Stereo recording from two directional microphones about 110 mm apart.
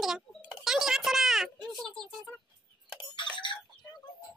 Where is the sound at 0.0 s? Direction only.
5° right (ahead or behind).